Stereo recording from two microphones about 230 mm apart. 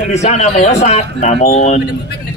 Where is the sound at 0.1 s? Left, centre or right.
Left.